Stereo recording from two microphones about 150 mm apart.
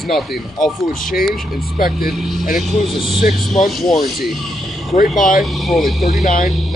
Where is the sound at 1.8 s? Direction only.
80° left.